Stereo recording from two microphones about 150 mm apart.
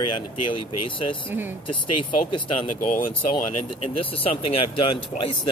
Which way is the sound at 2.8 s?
60° left (ahead or behind).